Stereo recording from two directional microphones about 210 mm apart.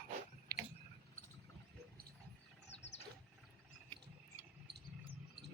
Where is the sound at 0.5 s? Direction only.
15° right (ahead or behind).